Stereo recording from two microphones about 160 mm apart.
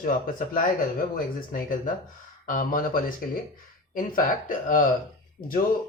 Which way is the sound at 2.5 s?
60° left (ahead or behind).